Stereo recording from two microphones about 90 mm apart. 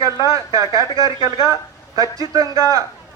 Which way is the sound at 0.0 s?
40° right (ahead or behind).